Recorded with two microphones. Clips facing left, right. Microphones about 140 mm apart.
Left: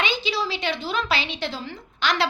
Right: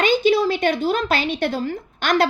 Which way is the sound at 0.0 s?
50° right (ahead or behind).